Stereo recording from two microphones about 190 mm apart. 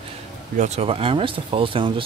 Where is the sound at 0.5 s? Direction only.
35° right (ahead or behind).